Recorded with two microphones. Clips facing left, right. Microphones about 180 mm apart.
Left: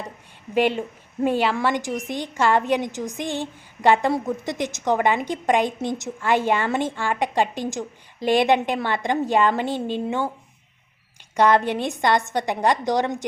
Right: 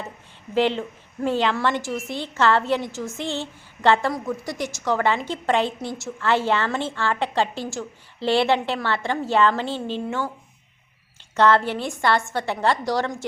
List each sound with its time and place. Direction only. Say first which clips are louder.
0.5 s a woman's voice: left 1 dB; 15° left (ahead or behind)
11.3 s a woman's voice: left 1 dB; 15° left (ahead or behind)